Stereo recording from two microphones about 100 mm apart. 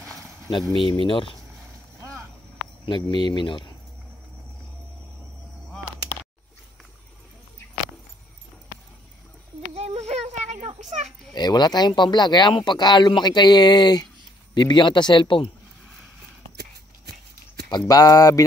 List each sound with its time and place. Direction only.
0.8 s speech: 60° left (ahead or behind)
2.8 s speech: 50° left (ahead or behind)
9.8 s a sound: 90° right
11.3 s speech: 45° left (ahead or behind)
17.6 s speech: 40° left (ahead or behind)